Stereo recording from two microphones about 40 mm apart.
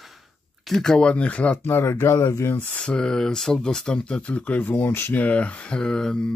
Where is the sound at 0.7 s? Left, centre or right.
Centre.